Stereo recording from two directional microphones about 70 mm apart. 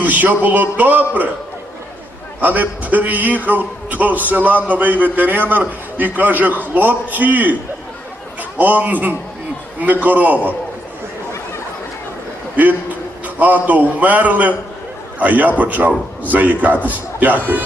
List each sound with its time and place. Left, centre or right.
0.0 s a man's voice: right
2.4 s a man's voice: right
12.5 s a man's voice: right